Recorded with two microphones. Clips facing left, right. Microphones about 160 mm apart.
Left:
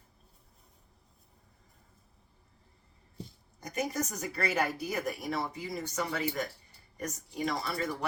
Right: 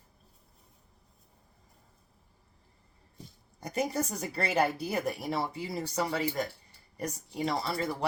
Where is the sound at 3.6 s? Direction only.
30° right (ahead or behind).